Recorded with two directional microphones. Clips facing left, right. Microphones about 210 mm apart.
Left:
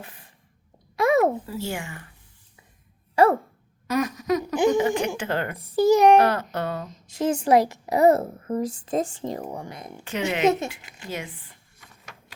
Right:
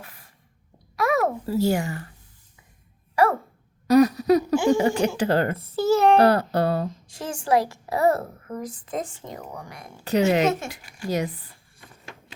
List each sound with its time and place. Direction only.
0.0 s a sound: 20° left (ahead or behind)
1.5 s speech: 40° right (ahead or behind)
3.8 s speech: 35° right (ahead or behind)
5.5 s a child's voice: 15° left (ahead or behind)
6.1 s speech: 35° right (ahead or behind)
6.9 s a woman's voice: 20° left (ahead or behind)
10.0 s speech: 40° right (ahead or behind)
10.4 s a child's voice: 15° left (ahead or behind)
11.1 s speech: 40° right (ahead or behind)